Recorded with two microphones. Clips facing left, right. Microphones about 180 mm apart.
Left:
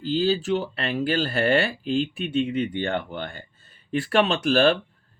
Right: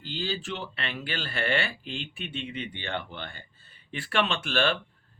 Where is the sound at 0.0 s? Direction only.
40° left (ahead or behind).